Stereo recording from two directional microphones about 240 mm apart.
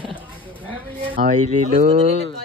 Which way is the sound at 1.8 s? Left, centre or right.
Right.